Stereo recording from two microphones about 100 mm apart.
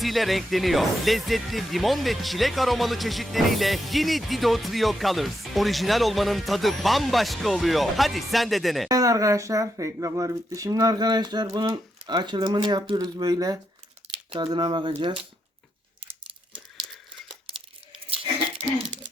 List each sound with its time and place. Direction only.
0.0 s speech: centre (ahead or behind)
8.9 s speech: 35° right (ahead or behind)
14.3 s speech: 50° right (ahead or behind)